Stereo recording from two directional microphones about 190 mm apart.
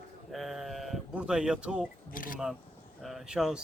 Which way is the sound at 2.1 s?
45° left (ahead or behind).